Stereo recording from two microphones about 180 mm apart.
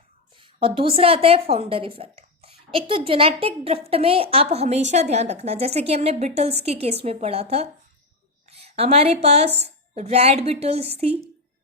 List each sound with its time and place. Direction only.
0.3 s a woman's voice: 30° right (ahead or behind)